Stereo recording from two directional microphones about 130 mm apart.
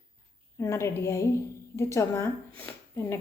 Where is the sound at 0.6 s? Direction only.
20° left (ahead or behind).